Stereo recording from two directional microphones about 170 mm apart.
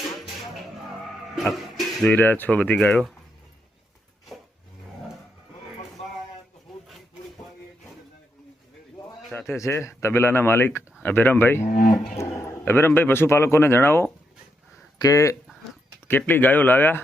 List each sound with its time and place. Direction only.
1.4 s a sound: centre (ahead or behind)
2.1 s a man's voice: 10° left (ahead or behind)
6.8 s a sound: centre (ahead or behind)
9.5 s a man's voice: 15° left (ahead or behind)
11.6 s speech: 45° left (ahead or behind)
12.1 s a man's voice: 15° left (ahead or behind)